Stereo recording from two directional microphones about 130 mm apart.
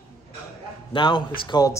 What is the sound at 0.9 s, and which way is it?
Speech, 40° left (ahead or behind).